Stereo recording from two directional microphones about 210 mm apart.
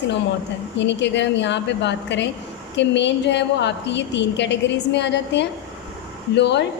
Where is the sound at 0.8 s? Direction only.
60° left (ahead or behind).